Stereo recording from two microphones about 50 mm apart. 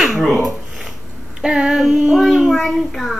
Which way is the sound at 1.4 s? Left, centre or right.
Centre.